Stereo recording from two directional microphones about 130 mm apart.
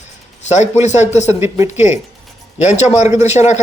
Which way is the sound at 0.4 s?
60° left (ahead or behind).